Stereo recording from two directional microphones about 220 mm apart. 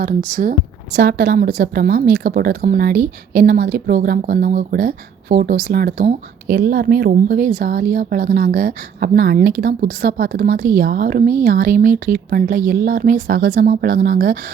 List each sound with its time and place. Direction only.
0.0 s a woman's voice: 40° right (ahead or behind)